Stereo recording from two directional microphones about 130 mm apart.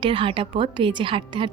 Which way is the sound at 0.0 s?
40° right (ahead or behind).